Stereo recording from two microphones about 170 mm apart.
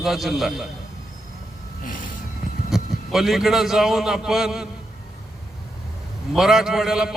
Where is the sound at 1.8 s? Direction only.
55° left (ahead or behind).